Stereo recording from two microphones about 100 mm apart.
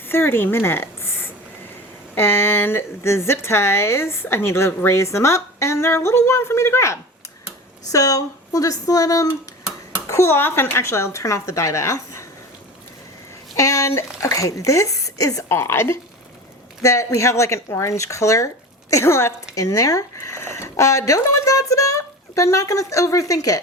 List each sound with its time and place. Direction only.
0.1 s a woman's voice: 25° left (ahead or behind)
13.6 s a woman's voice: 30° left (ahead or behind)